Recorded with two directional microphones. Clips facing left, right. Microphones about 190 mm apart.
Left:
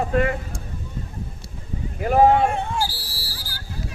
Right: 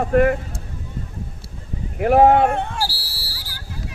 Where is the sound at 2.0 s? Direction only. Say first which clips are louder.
Right 3 dB; 65° right (ahead or behind).